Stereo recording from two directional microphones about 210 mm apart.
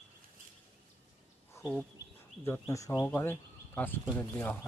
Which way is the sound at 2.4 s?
15° left (ahead or behind).